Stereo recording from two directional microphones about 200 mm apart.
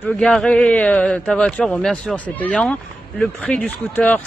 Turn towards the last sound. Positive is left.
turn(degrees=5)  # may be behind; listen again after turning